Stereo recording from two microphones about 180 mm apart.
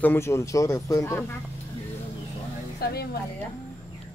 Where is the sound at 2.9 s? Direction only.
60° left (ahead or behind).